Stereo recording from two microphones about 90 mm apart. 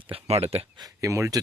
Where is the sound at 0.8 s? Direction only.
40° right (ahead or behind).